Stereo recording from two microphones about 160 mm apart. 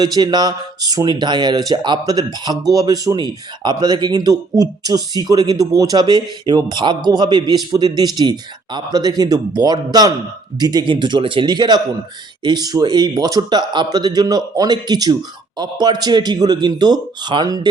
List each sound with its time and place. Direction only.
0.0 s speech: 25° right (ahead or behind)